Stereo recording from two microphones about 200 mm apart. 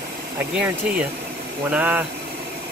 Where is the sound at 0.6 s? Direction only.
5° right (ahead or behind).